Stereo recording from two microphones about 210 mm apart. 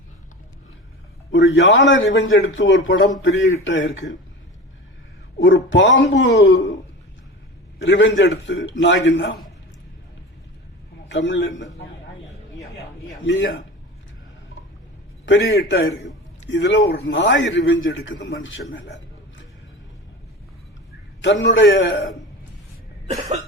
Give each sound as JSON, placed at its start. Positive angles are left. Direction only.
{"t": 1.3, "sound": "a man's voice", "side_deg": 55}
{"t": 5.4, "sound": "a man's voice", "side_deg": 60}
{"t": 7.9, "sound": "a man's voice", "side_deg": 60}
{"t": 11.1, "sound": "a man's voice", "side_deg": 60}
{"t": 13.2, "sound": "a man's voice", "side_deg": 60}
{"t": 15.3, "sound": "a man's voice", "side_deg": 50}
{"t": 18.7, "sound": "a sound", "side_deg": 60}
{"t": 21.2, "sound": "a man's voice", "side_deg": 60}